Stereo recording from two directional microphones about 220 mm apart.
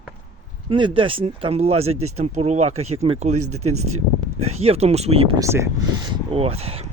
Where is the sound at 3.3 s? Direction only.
90° right.